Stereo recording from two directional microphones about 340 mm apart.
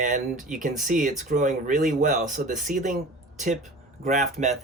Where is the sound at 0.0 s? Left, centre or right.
Right.